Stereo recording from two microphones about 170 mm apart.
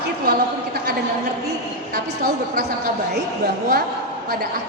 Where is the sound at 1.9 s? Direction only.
65° right (ahead or behind).